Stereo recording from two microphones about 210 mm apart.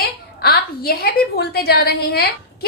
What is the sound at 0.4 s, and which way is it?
A woman's voice, 50° left (ahead or behind).